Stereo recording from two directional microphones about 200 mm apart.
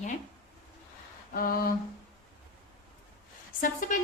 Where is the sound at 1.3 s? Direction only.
45° left (ahead or behind).